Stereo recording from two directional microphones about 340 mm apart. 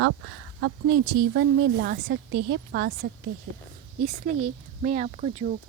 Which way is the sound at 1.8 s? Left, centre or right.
Right.